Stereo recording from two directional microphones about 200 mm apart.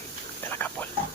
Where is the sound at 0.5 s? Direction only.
10° left (ahead or behind).